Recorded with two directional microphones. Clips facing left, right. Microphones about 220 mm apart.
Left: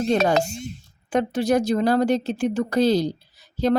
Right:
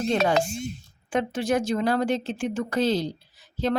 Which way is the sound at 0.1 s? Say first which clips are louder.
Left 3 dB; 40° left (ahead or behind).